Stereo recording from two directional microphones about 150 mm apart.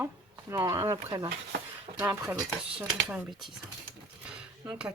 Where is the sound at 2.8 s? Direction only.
5° right (ahead or behind).